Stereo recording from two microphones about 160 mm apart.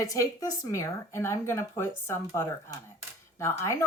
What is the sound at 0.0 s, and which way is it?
Speech, 20° left (ahead or behind).